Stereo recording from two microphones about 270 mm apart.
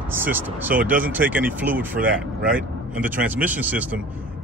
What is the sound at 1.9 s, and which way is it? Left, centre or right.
Speech, right.